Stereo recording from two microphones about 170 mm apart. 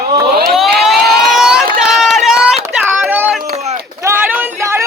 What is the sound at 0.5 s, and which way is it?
Siren, centre (ahead or behind).